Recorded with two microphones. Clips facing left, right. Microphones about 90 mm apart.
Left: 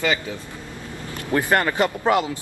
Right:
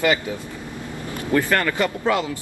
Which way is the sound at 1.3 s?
20° left (ahead or behind).